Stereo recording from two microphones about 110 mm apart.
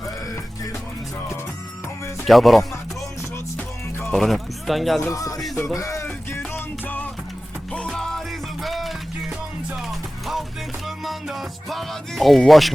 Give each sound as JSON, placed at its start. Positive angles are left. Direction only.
{"t": 2.2, "sound": "speech", "side_deg": 0}
{"t": 4.1, "sound": "speech", "side_deg": 0}
{"t": 5.0, "sound": "speech", "side_deg": 30}
{"t": 6.1, "sound": "music", "side_deg": 20}